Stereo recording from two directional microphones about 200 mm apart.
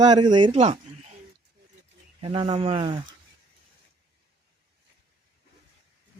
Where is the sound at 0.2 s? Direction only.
20° right (ahead or behind).